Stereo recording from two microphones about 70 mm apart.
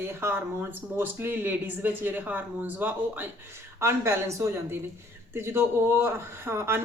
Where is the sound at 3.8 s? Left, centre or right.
Right.